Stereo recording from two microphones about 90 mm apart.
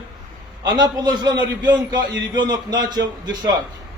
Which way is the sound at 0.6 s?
50° right (ahead or behind).